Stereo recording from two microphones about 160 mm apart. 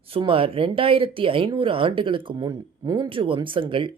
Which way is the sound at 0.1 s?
35° right (ahead or behind).